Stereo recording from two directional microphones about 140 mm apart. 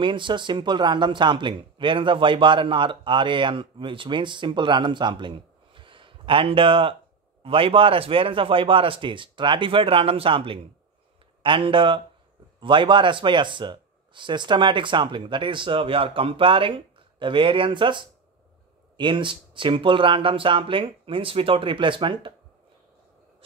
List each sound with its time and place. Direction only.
0.0 s speech: 35° right (ahead or behind)